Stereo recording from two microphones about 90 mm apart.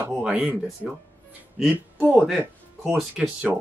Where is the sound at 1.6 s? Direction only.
15° right (ahead or behind).